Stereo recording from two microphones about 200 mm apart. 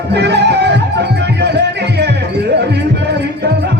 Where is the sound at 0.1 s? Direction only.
55° right (ahead or behind).